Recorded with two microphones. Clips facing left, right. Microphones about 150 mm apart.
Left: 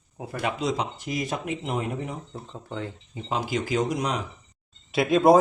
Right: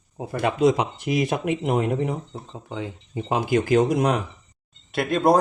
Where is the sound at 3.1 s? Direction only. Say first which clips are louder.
Right 7 dB; 55° right (ahead or behind).